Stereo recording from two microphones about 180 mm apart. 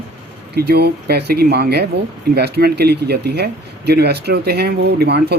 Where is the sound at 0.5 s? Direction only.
60° right (ahead or behind).